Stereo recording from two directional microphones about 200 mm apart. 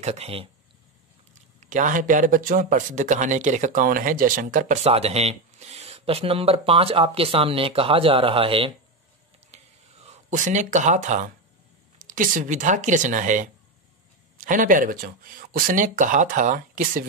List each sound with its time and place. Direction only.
0.0 s speech: 30° right (ahead or behind)
1.6 s speech: 40° right (ahead or behind)
9.5 s whispering: 35° right (ahead or behind)
10.0 s speech: 40° right (ahead or behind)